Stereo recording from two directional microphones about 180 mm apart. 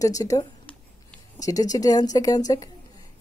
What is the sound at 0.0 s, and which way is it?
Speech, 20° left (ahead or behind).